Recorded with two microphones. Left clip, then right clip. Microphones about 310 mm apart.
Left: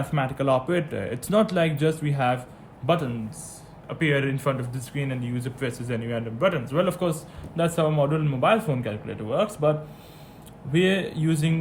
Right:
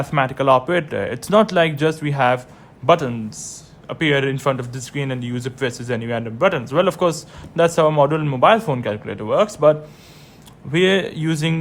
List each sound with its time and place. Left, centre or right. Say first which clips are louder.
0.1 s speech: right 8 dB; centre
10.7 s speech: right 6 dB; right